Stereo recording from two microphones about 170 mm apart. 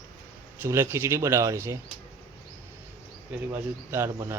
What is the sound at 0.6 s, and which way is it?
Speech, 15° right (ahead or behind).